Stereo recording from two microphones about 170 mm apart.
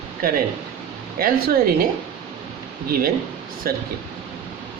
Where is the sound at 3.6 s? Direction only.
60° right (ahead or behind).